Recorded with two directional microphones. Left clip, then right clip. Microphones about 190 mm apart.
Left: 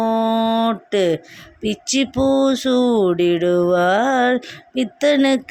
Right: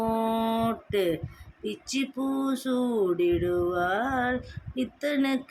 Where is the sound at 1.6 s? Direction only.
40° left (ahead or behind).